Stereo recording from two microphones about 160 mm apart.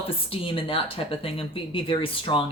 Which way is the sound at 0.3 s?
35° left (ahead or behind).